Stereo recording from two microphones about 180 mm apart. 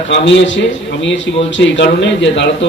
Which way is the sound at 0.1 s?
85° left.